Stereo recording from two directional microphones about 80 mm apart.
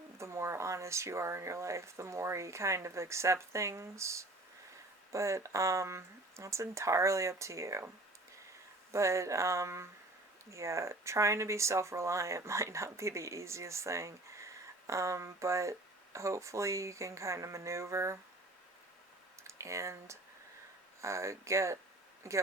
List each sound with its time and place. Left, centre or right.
0.2 s speech: right
8.9 s speech: right
19.5 s speech: right